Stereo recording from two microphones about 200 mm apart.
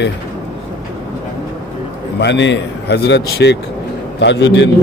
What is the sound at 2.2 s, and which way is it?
A man's voice, 60° left (ahead or behind).